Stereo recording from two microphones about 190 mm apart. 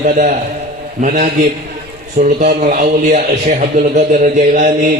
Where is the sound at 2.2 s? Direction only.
45° right (ahead or behind).